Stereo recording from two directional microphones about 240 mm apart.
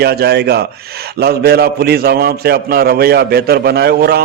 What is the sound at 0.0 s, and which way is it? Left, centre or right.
A man's voice, right.